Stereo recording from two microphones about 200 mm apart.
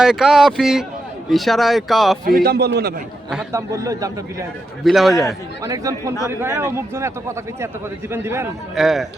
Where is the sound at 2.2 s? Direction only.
50° right (ahead or behind).